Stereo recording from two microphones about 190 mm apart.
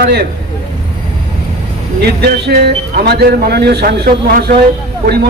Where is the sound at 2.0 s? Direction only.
60° right (ahead or behind).